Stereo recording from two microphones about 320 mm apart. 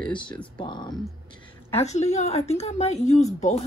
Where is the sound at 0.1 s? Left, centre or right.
Centre.